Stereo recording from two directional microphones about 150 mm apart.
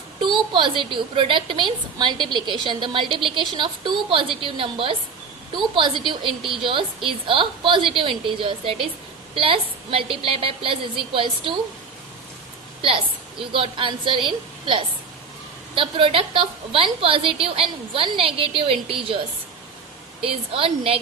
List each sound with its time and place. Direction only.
0.3 s a woman's voice: 30° right (ahead or behind)
13.5 s a woman's voice: 35° right (ahead or behind)
20.2 s a woman's voice: 40° right (ahead or behind)